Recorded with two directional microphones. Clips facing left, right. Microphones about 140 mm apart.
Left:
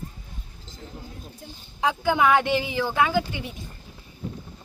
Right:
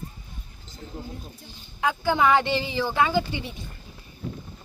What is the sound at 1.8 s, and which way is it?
Speech, 15° left (ahead or behind).